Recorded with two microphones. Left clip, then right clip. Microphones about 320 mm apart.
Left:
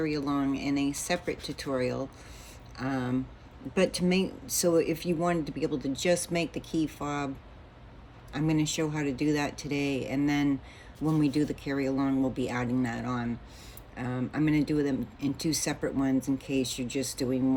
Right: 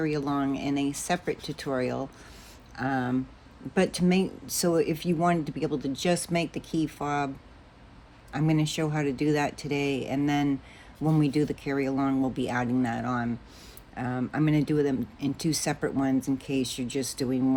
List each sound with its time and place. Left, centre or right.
0.0 s speech: right
8.3 s speech: right